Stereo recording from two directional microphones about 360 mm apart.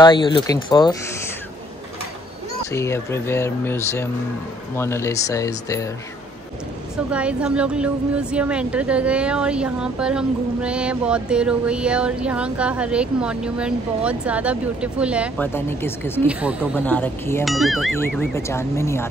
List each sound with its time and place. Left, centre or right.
0.0 s speech: centre
2.7 s speech: centre
7.1 s speech: centre